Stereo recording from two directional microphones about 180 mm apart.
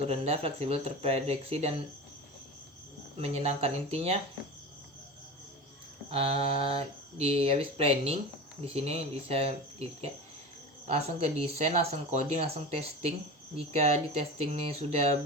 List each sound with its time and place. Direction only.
0.0 s speech: 35° right (ahead or behind)
3.2 s speech: 35° right (ahead or behind)
6.1 s speech: 35° right (ahead or behind)